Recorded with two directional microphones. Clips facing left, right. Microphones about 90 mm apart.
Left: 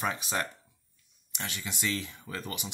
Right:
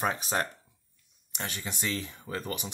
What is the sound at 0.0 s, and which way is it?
Speech, 40° right (ahead or behind).